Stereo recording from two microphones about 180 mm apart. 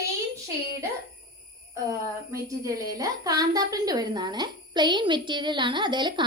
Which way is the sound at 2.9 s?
20° right (ahead or behind).